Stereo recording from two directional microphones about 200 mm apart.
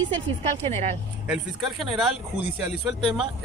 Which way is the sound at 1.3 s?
Centre (ahead or behind).